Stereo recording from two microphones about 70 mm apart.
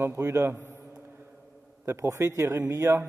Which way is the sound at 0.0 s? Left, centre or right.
Right.